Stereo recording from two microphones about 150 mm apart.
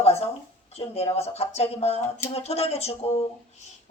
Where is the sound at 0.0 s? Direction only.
40° left (ahead or behind).